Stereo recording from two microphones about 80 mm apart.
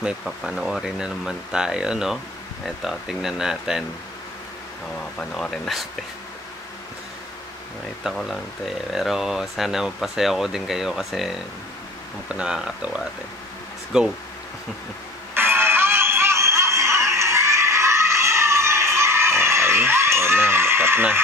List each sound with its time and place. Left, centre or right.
0.2 s speech: centre
5.2 s speech: centre
8.0 s speech: centre
15.3 s a sound: right